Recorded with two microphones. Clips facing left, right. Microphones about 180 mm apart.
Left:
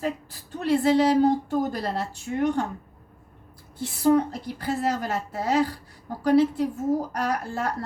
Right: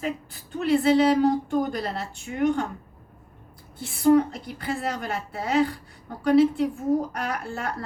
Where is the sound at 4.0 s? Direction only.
40° left (ahead or behind).